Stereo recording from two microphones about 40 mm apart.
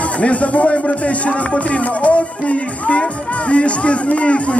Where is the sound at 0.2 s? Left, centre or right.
Left.